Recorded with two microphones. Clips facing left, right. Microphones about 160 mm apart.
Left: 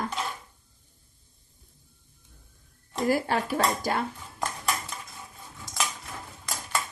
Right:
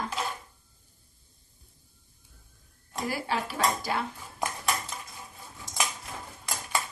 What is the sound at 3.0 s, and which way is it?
Speech, 45° left (ahead or behind).